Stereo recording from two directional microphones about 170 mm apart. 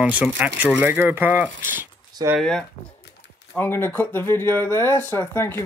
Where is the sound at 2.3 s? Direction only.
5° left (ahead or behind).